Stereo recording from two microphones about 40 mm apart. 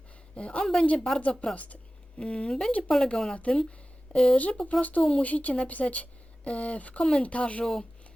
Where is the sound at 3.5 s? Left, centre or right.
Left.